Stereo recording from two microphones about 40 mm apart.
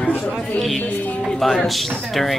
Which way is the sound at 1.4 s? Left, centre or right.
Centre.